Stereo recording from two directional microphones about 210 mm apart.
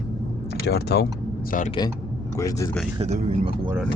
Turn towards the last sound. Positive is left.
turn(degrees=-30)  # may be behind; listen again after turning